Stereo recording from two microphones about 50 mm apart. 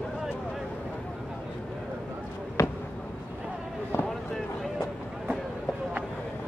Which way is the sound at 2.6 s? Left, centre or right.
Left.